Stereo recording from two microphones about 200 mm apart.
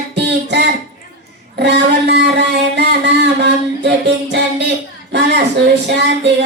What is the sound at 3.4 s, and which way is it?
Music, 60° right (ahead or behind).